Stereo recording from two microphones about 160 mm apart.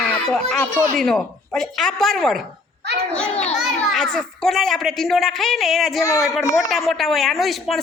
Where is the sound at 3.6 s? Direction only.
Centre (ahead or behind).